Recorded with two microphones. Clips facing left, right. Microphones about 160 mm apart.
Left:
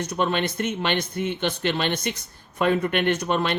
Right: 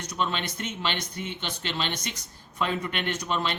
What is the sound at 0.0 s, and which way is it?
Speech, 55° left (ahead or behind).